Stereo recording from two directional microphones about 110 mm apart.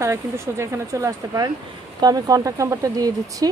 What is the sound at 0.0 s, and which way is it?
Speech, 25° right (ahead or behind).